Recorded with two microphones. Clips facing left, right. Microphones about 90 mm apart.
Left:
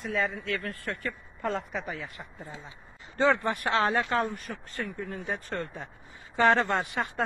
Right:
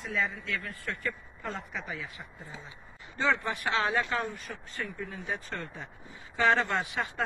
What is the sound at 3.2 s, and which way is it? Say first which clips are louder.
Speech: left 4 dB; 55° left (ahead or behind).